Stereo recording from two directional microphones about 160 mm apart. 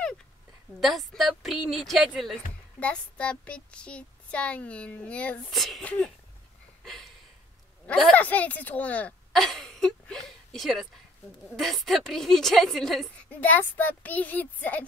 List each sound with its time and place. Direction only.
0.7 s a woman's voice: centre (ahead or behind)
6.8 s a sound: centre (ahead or behind)
7.8 s a woman's voice: 5° left (ahead or behind)